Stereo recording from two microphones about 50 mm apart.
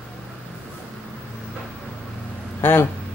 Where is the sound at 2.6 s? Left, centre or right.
Left.